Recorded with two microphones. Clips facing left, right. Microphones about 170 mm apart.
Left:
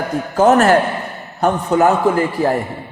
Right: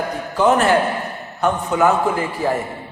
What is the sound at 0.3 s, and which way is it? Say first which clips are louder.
A man's voice: left 4 dB; 45° left (ahead or behind).